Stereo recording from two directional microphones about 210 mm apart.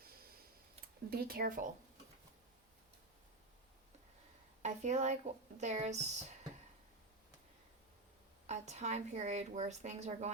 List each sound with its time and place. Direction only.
1.1 s speech: 45° right (ahead or behind)
4.6 s a woman's voice: 35° right (ahead or behind)
8.4 s a woman's voice: 35° right (ahead or behind)